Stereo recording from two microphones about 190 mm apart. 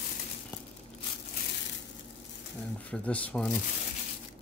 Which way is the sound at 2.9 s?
5° left (ahead or behind).